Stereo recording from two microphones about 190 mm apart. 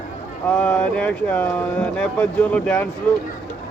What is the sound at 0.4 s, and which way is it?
Speech, 5° left (ahead or behind).